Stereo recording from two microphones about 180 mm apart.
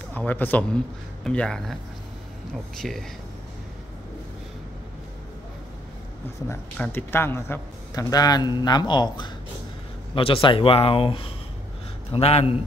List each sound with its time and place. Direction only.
0.1 s speech: 10° left (ahead or behind)
2.8 s speech: centre (ahead or behind)
6.5 s a man's voice: 10° left (ahead or behind); by 12.5 s 35° left (ahead or behind)